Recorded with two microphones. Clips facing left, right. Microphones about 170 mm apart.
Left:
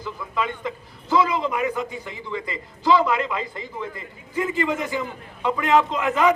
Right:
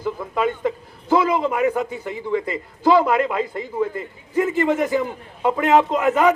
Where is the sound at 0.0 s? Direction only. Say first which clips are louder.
Right 6 dB; 45° right (ahead or behind).